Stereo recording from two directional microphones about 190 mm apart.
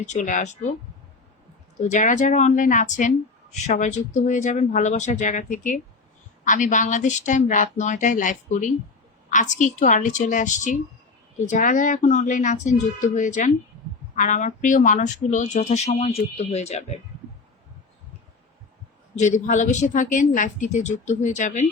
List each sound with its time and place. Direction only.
0.0 s speech: 40° left (ahead or behind)
1.9 s speech: 40° left (ahead or behind)
19.1 s speech: 40° left (ahead or behind)